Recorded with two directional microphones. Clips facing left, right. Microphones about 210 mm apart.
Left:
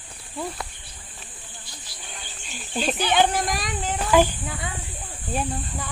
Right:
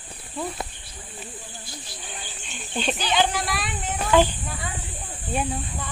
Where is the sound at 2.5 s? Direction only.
5° left (ahead or behind).